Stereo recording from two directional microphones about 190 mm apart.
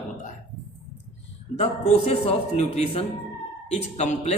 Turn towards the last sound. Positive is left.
turn(degrees=40)  # may be behind; listen again after turning